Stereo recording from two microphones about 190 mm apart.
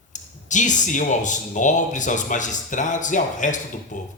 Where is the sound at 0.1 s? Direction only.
40° left (ahead or behind).